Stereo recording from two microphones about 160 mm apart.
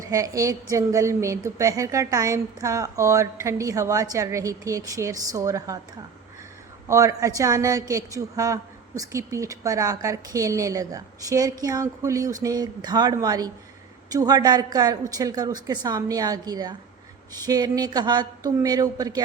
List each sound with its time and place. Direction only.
0.0 s a woman's voice: 20° right (ahead or behind)
6.8 s a woman's voice: 20° right (ahead or behind)